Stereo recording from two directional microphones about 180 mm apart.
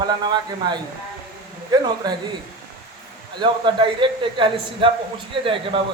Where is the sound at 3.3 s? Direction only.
25° right (ahead or behind).